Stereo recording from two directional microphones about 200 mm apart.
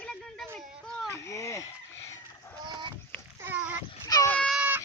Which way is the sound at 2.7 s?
20° right (ahead or behind).